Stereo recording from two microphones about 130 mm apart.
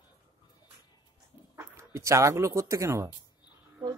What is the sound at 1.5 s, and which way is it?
Speech, 20° right (ahead or behind).